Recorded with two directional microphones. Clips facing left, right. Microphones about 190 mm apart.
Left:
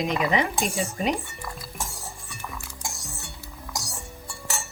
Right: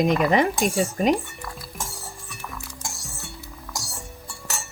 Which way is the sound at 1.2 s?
Centre (ahead or behind).